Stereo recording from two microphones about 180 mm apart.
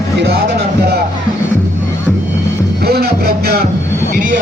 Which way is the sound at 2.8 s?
60° right (ahead or behind).